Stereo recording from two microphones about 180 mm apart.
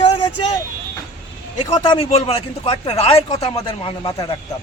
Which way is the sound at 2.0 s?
35° left (ahead or behind).